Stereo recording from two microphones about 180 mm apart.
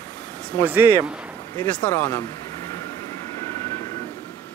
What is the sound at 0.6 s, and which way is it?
Speech, 10° right (ahead or behind).